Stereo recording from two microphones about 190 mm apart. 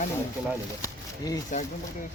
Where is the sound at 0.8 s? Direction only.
20° left (ahead or behind).